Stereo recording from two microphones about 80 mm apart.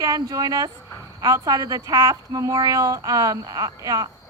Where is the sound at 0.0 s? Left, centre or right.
Right.